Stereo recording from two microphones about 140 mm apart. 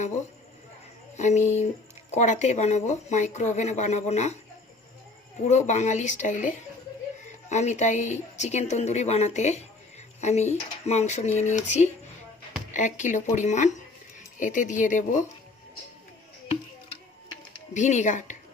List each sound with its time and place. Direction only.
1.1 s speech: 55° left (ahead or behind)
5.5 s speech: 60° left (ahead or behind)
17.7 s speech: 60° left (ahead or behind)